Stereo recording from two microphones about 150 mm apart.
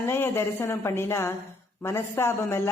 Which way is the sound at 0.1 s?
15° left (ahead or behind).